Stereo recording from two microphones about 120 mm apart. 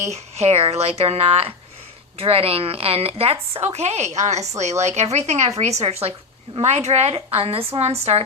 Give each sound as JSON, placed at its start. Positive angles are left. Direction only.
{"t": 0.0, "sound": "a woman's voice", "side_deg": -65}